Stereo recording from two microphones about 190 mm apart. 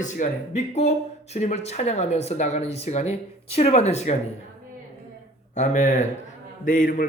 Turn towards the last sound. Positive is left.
turn(degrees=45)  # may be behind; listen again after turning